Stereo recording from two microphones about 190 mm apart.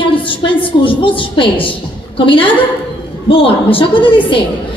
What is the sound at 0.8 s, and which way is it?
A woman's voice, 25° left (ahead or behind).